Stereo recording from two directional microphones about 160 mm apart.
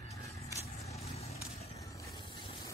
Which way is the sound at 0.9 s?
40° left (ahead or behind).